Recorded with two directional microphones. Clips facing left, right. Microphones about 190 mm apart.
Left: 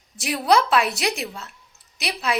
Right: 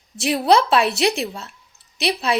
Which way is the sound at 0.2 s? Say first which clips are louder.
Right 3 dB; 25° right (ahead or behind).